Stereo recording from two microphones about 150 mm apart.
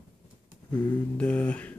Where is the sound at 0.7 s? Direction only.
10° left (ahead or behind).